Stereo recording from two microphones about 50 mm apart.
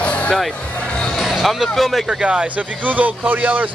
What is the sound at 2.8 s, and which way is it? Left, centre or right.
Speech, right.